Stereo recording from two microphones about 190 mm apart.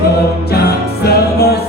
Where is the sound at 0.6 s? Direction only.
55° left (ahead or behind).